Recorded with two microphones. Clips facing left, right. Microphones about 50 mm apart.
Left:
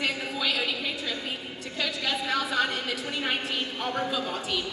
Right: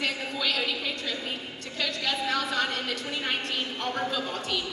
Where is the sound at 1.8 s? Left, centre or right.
Centre.